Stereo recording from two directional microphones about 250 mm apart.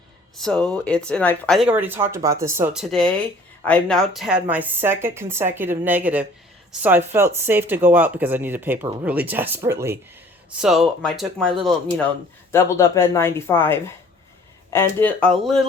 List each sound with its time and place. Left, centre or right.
0.3 s speech: centre